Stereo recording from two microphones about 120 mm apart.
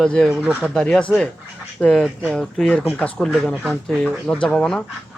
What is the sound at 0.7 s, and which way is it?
Speech, 5° left (ahead or behind).